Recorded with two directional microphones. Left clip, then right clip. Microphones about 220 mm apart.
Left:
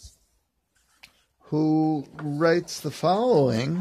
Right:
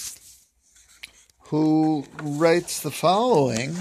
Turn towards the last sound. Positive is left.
turn(degrees=25)  # may be behind; listen again after turning